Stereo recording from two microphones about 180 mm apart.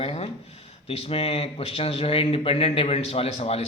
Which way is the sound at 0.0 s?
35° left (ahead or behind).